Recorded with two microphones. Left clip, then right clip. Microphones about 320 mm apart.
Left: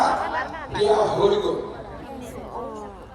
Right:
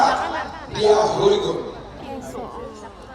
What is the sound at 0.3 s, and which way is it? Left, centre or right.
Crowd, centre.